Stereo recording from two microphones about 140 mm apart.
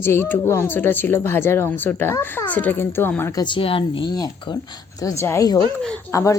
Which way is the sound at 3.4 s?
35° left (ahead or behind).